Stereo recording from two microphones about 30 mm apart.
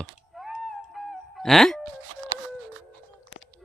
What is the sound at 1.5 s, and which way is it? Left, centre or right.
Speech, centre.